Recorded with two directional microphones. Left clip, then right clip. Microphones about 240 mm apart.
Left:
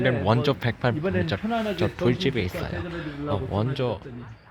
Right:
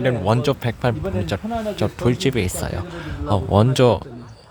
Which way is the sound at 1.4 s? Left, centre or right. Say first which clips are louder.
Right 2 dB; left.